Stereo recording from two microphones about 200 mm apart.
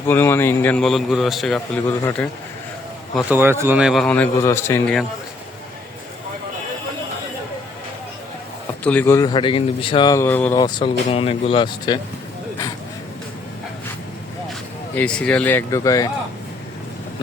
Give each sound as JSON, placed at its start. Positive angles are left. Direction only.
{"t": 0.1, "sound": "a man's voice", "side_deg": 10}
{"t": 3.2, "sound": "a man's voice", "side_deg": -10}
{"t": 8.8, "sound": "a man's voice", "side_deg": 10}
{"t": 10.6, "sound": "speech", "side_deg": 20}
{"t": 14.9, "sound": "a man's voice", "side_deg": 5}